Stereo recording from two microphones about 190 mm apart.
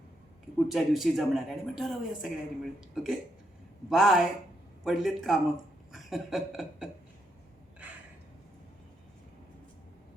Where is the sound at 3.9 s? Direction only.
Centre (ahead or behind).